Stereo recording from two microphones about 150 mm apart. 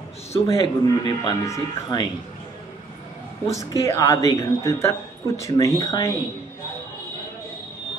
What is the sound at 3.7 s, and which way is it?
A woman's voice, 20° left (ahead or behind).